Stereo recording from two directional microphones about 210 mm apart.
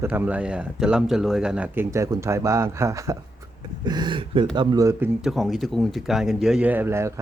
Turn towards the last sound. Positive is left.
turn(degrees=-10)  # may be behind; listen again after turning